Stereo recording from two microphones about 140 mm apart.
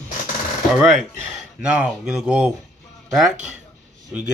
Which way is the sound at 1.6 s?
5° right (ahead or behind).